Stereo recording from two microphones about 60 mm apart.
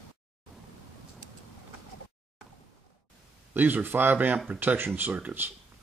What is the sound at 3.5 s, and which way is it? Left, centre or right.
Speech, right.